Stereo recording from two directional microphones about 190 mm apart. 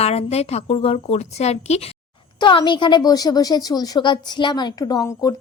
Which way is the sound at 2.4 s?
25° left (ahead or behind).